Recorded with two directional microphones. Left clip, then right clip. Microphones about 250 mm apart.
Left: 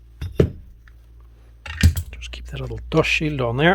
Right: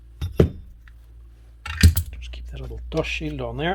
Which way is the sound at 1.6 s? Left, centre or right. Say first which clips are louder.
Right 1 dB; centre.